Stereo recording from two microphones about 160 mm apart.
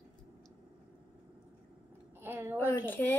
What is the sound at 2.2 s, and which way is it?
Speech, 15° right (ahead or behind).